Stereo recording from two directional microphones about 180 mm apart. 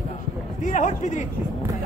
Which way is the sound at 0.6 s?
40° left (ahead or behind).